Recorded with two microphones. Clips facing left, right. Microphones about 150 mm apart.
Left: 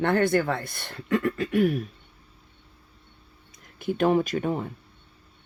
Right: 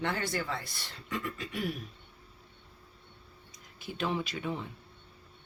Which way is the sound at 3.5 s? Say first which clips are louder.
Left 12 dB; 55° left (ahead or behind).